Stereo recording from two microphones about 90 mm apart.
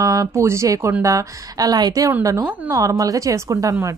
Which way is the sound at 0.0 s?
40° right (ahead or behind).